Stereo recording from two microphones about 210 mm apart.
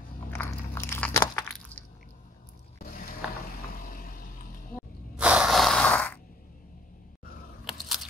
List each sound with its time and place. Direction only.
0.3 s biting: 10° left (ahead or behind)
2.8 s a sound: 40° left (ahead or behind)
5.1 s gasp: 5° right (ahead or behind)
7.6 s biting: centre (ahead or behind)